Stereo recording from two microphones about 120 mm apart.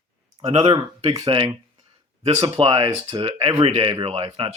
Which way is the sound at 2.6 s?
45° right (ahead or behind).